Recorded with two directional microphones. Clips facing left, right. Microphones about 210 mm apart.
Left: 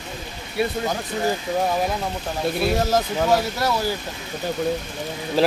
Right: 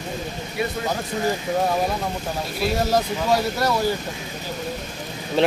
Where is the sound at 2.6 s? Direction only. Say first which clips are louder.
Right 1 dB; centre (ahead or behind).